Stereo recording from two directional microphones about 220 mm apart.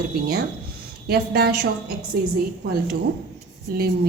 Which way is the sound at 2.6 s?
45° right (ahead or behind).